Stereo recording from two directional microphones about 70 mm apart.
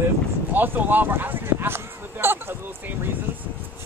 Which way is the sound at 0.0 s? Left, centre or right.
Right.